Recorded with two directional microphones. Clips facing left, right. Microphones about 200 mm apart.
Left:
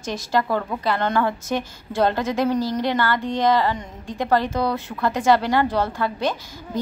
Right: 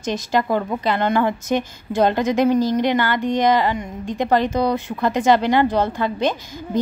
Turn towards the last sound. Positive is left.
turn(degrees=-20)  # may be behind; listen again after turning